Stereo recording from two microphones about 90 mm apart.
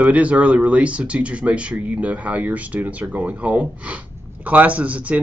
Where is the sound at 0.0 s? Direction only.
15° right (ahead or behind).